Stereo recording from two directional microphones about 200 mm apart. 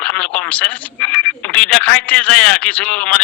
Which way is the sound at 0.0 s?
5° left (ahead or behind).